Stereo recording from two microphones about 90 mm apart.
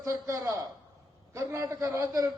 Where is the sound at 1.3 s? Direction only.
35° right (ahead or behind).